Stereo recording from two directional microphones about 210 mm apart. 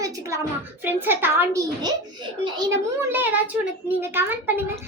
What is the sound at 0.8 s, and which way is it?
A child's voice, 10° right (ahead or behind).